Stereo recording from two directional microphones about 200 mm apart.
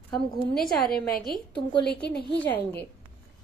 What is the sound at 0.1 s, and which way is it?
Speech, centre (ahead or behind).